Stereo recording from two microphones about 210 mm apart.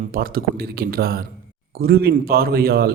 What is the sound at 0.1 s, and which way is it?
A man's voice, 45° right (ahead or behind).